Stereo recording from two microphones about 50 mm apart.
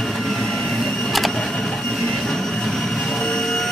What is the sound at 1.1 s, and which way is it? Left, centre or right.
Printer, centre.